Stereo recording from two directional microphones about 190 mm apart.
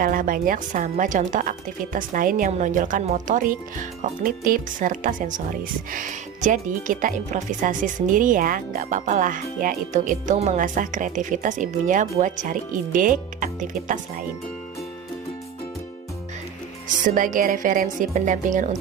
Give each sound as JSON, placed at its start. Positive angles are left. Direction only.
{"t": 0.0, "sound": "speech", "side_deg": -45}
{"t": 17.0, "sound": "speech", "side_deg": -45}